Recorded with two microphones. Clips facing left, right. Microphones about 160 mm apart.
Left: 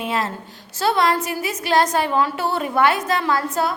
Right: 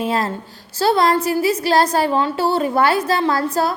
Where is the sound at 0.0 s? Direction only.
35° right (ahead or behind).